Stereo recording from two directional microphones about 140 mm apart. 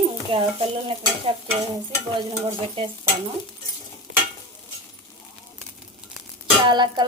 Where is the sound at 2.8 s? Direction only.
40° right (ahead or behind).